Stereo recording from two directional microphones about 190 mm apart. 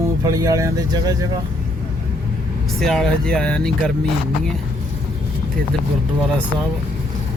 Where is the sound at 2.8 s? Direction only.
Centre (ahead or behind).